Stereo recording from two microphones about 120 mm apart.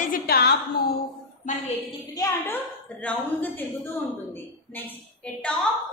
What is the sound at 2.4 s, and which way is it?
A woman's voice, 15° left (ahead or behind).